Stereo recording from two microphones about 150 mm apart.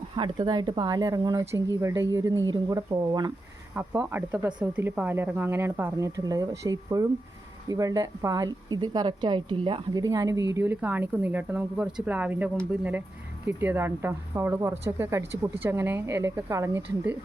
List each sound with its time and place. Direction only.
0.2 s a woman's voice: 30° right (ahead or behind)
3.8 s a woman's voice: 10° right (ahead or behind)